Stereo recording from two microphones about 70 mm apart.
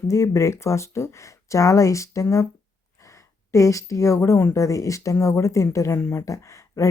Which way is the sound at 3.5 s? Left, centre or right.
Left.